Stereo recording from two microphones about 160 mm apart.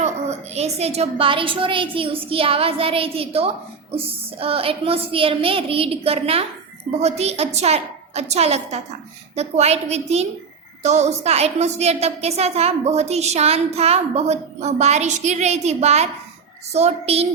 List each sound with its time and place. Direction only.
0.0 s a woman's voice: 45° right (ahead or behind)